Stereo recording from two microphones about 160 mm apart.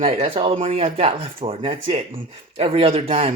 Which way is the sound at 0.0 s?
35° right (ahead or behind).